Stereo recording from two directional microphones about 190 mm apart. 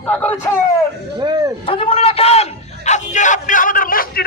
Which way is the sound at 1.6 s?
30° left (ahead or behind).